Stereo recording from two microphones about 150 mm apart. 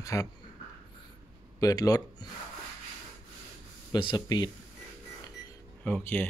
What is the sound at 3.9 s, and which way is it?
Speech, 30° left (ahead or behind).